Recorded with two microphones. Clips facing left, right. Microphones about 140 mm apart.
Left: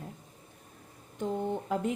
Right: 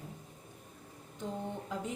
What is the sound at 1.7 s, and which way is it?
Speech, 60° left (ahead or behind).